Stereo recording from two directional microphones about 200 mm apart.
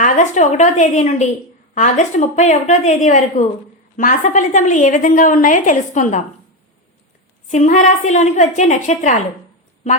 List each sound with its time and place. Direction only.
0.0 s a woman's voice: 40° left (ahead or behind)
7.5 s a woman's voice: 35° left (ahead or behind)